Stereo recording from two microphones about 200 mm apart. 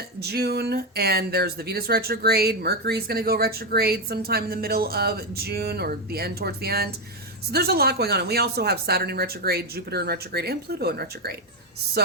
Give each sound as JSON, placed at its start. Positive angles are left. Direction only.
{"t": 0.2, "sound": "speech", "side_deg": -55}